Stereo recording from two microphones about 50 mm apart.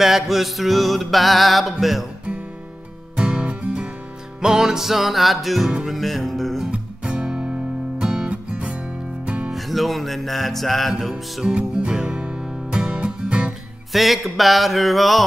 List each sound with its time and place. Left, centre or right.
0.0 s music: centre
3.2 s music: right
4.4 s music: centre
6.7 s music: centre
9.5 s music: centre
11.4 s music: centre
13.9 s music: centre